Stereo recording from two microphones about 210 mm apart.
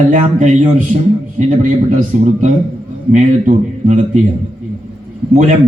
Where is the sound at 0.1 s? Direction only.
40° right (ahead or behind).